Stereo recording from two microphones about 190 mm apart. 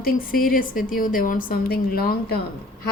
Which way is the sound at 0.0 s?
50° left (ahead or behind).